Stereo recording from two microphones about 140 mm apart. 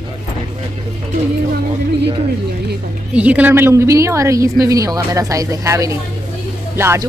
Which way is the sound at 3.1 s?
10° right (ahead or behind).